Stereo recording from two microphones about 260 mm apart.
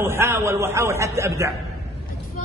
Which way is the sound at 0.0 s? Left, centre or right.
Centre.